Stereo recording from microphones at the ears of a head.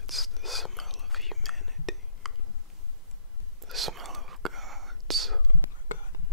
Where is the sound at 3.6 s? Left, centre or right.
Right.